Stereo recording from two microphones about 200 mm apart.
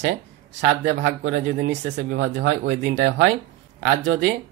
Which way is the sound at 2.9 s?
55° right (ahead or behind).